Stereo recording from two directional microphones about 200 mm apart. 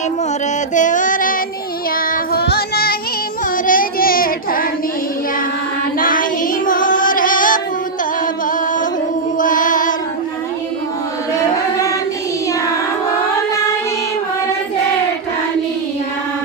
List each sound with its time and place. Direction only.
0.7 s music: 40° left (ahead or behind)
2.3 s child singing: 50° left (ahead or behind)
6.0 s child singing: 45° left (ahead or behind)
6.7 s music: 40° left (ahead or behind)
9.4 s child singing: 40° left (ahead or behind)